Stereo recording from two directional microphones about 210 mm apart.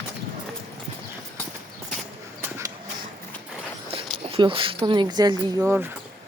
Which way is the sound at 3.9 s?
25° right (ahead or behind).